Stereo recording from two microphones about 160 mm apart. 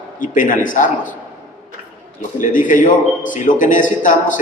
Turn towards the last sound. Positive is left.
turn(degrees=55)  # may be behind; listen again after turning